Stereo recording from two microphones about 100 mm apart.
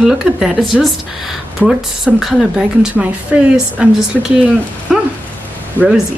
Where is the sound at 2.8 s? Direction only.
15° right (ahead or behind).